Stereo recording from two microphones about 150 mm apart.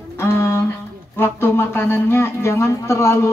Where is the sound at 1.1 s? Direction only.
15° left (ahead or behind).